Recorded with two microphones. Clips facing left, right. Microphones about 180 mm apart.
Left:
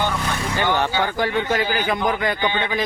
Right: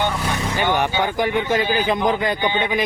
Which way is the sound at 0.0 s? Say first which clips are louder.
Right 1 dB; 15° right (ahead or behind).